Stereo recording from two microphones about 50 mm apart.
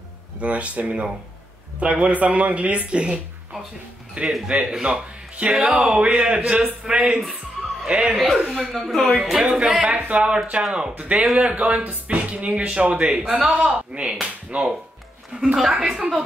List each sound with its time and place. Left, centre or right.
0.4 s speech: right
4.5 s speech: centre
6.6 s speech: centre
8.7 s speech: centre
9.8 s speech: right
15.4 s speech: centre